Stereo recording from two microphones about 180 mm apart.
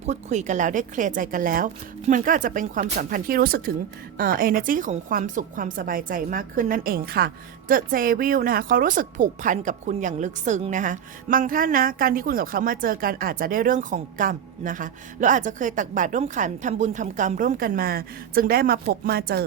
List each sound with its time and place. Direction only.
0.0 s speech: 40° right (ahead or behind); by 19.5 s 60° right (ahead or behind)